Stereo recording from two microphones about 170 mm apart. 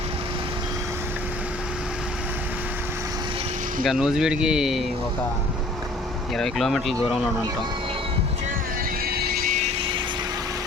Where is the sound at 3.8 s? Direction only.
5° right (ahead or behind).